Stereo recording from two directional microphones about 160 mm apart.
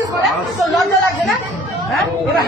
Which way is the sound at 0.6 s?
Centre (ahead or behind).